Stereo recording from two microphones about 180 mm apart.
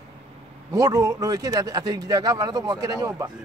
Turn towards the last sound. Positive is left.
turn(degrees=-20)  # may be behind; listen again after turning